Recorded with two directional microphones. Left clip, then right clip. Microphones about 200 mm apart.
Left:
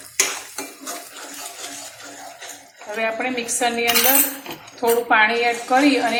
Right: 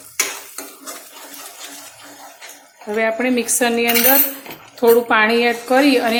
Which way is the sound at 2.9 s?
55° right (ahead or behind).